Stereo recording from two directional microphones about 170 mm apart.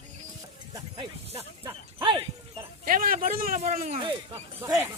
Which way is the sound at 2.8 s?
55° right (ahead or behind).